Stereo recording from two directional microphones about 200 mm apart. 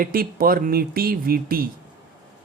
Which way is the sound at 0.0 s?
45° right (ahead or behind).